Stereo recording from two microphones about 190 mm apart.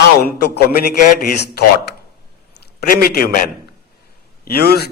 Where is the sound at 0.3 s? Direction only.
55° left (ahead or behind).